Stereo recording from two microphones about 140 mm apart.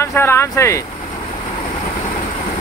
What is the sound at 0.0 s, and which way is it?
Speech, 15° left (ahead or behind).